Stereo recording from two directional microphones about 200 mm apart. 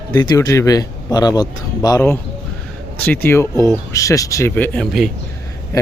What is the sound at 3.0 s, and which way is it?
Speech, 10° left (ahead or behind).